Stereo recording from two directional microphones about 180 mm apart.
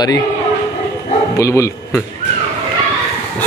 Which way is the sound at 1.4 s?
15° left (ahead or behind).